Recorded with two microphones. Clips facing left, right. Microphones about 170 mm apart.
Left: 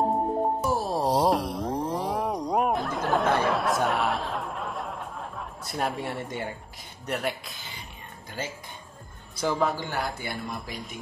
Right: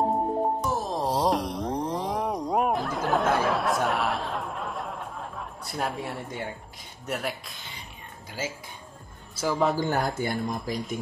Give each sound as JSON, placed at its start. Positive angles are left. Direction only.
{"t": 0.0, "sound": "music", "side_deg": 0}
{"t": 7.1, "sound": "speech", "side_deg": 0}
{"t": 9.8, "sound": "speech", "side_deg": -45}